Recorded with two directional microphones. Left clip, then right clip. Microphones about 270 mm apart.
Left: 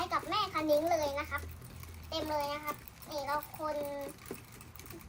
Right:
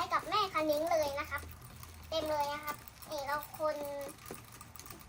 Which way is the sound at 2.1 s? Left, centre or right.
Centre.